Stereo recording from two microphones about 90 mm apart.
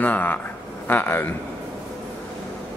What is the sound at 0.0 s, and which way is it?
Speech, 20° left (ahead or behind).